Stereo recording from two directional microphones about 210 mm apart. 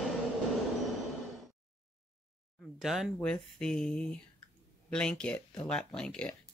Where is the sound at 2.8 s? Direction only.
Centre (ahead or behind).